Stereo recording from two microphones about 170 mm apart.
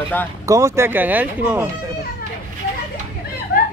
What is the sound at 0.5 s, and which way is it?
Speech, 15° right (ahead or behind).